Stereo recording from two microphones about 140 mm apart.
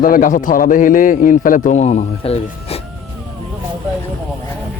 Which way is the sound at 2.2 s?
45° left (ahead or behind).